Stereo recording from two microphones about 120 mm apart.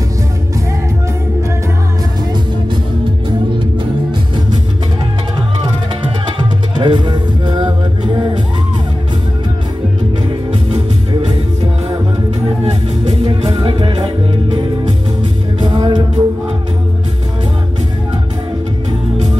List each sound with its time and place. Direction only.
6.8 s music: 40° right (ahead or behind)
13.3 s music: 40° right (ahead or behind)
15.6 s music: 35° right (ahead or behind)